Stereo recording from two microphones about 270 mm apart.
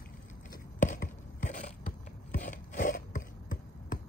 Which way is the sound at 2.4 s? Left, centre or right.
Left.